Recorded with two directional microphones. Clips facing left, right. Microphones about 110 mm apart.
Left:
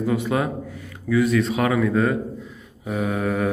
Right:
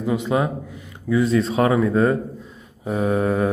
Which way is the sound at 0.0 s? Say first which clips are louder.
Right 1 dB; 20° right (ahead or behind).